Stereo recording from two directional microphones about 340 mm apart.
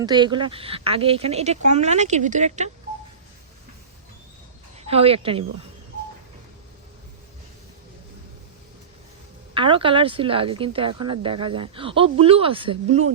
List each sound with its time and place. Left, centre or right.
0.0 s speech: centre
4.8 s speech: centre
9.6 s speech: centre